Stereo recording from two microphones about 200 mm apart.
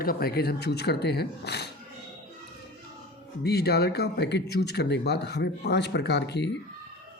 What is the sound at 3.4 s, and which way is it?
Speech, 50° left (ahead or behind).